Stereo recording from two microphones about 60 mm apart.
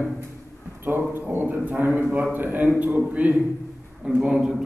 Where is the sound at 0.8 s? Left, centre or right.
Right.